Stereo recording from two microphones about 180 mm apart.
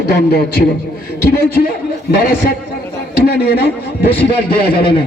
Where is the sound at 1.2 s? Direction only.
65° left (ahead or behind).